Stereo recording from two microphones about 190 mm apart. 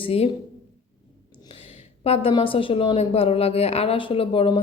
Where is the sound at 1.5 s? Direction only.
30° left (ahead or behind).